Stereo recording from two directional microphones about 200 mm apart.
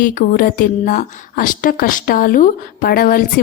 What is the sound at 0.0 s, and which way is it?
A woman's voice, 40° left (ahead or behind).